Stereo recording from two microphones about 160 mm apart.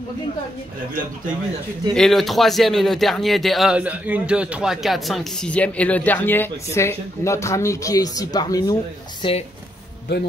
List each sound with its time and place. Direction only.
2.0 s speech: centre (ahead or behind); by 9.4 s 30° left (ahead or behind)